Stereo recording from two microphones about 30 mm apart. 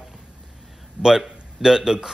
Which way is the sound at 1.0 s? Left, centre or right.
Centre.